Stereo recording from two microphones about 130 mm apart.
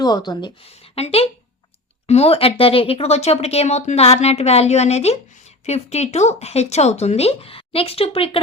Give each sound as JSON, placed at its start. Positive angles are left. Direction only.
{"t": 0.0, "sound": "a woman's voice", "side_deg": 35}
{"t": 0.6, "sound": "speech", "side_deg": 50}